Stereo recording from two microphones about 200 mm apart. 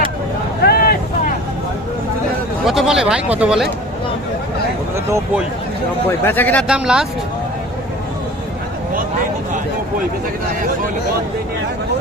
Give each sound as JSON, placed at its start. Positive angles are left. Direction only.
{"t": 0.6, "sound": "vehicle", "side_deg": 50}
{"t": 2.6, "sound": "speech", "side_deg": 0}
{"t": 6.1, "sound": "speech", "side_deg": 10}
{"t": 6.7, "sound": "speech", "side_deg": -5}